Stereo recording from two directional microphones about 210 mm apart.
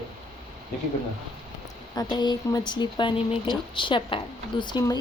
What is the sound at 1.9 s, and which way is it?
Speech, 20° left (ahead or behind).